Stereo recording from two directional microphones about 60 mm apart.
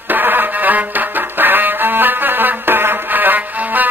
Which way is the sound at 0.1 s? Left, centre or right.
Right.